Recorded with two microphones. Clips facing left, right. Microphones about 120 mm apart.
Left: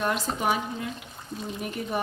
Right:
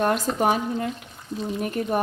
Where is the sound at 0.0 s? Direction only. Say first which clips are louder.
Right 5 dB; 50° right (ahead or behind).